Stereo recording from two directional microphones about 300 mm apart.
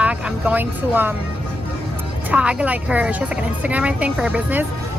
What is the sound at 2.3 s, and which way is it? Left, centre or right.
Speech, centre.